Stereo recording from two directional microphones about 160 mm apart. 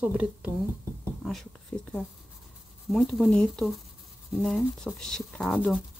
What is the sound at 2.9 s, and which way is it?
Speech, centre (ahead or behind).